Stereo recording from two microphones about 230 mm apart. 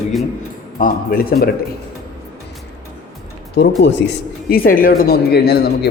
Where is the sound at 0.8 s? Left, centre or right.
Left.